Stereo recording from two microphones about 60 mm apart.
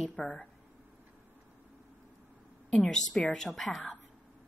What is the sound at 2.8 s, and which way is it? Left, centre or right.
A woman's voice, centre.